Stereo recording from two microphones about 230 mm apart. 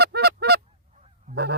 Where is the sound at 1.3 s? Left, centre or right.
Right.